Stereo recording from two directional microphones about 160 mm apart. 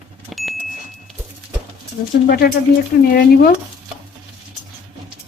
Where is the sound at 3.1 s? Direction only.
70° left (ahead or behind).